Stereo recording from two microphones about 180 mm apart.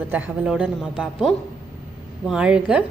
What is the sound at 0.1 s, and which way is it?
A woman's voice, 10° right (ahead or behind).